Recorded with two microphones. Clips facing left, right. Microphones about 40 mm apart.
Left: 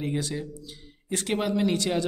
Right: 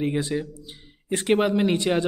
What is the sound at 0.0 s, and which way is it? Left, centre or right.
Speech, right.